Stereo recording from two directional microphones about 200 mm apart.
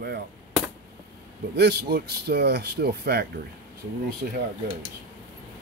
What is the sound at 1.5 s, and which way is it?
Speech, 55° right (ahead or behind).